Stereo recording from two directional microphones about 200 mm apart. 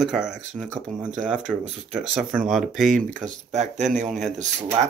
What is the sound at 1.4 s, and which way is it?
Speech, 35° right (ahead or behind).